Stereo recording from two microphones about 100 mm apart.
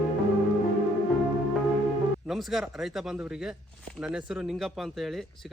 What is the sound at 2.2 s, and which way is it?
A man's voice, centre (ahead or behind).